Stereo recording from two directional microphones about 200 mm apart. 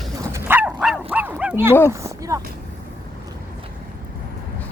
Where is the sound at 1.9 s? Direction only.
15° right (ahead or behind).